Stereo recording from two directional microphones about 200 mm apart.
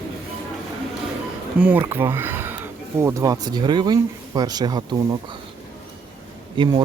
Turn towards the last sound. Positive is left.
turn(degrees=-25)  # may be behind; listen again after turning